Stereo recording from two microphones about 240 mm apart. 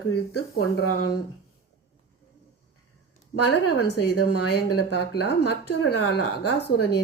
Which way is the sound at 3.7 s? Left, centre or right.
Left.